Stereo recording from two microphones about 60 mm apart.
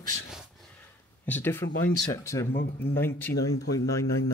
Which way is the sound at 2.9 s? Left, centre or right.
Left.